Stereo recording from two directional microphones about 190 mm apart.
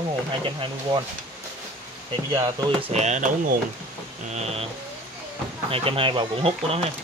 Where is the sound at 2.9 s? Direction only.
35° right (ahead or behind).